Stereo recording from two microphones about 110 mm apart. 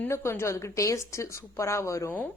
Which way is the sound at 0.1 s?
25° left (ahead or behind).